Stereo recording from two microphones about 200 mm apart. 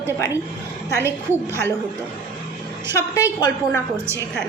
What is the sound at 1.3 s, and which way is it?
Speech, 10° left (ahead or behind).